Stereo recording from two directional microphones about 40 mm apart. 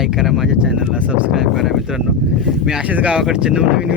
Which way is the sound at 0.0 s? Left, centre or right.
Centre.